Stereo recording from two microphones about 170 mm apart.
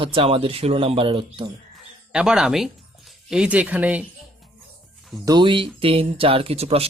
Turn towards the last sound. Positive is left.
turn(degrees=-35)  # may be behind; listen again after turning